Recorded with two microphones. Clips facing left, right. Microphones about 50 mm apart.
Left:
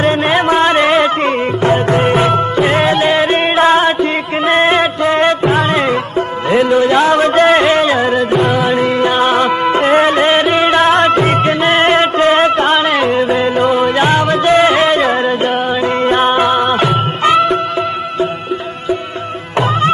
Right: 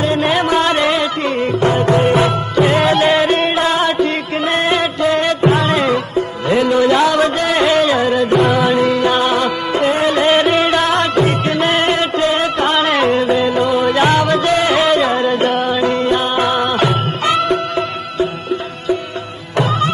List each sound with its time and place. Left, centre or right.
0.0 s music: left
8.3 s music: centre
8.6 s music: left
12.8 s music: centre
13.3 s music: left
15.3 s music: centre; by 16.4 s left
16.4 s music: centre